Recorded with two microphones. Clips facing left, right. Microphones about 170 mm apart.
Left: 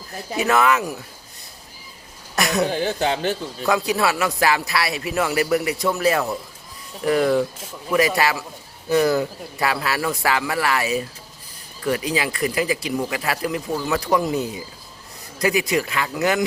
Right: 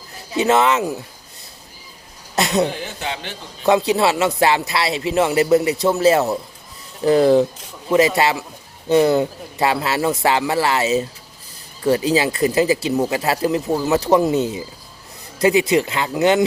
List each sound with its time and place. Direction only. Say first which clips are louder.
0.3 s speech: right 3 dB; 20° right (ahead or behind)
2.3 s speech: right 3 dB; 20° right (ahead or behind)
2.8 s speech: left 7 dB; 40° left (ahead or behind)
3.7 s speech: right 5 dB; 20° right (ahead or behind)